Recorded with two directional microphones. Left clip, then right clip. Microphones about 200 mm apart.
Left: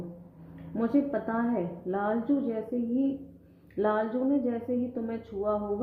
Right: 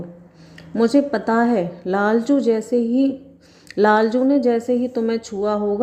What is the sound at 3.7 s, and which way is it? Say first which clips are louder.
Speech: right 12 dB; 45° right (ahead or behind).